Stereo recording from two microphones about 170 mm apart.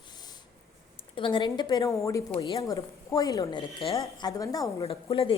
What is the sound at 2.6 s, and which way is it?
A woman's voice, 20° left (ahead or behind).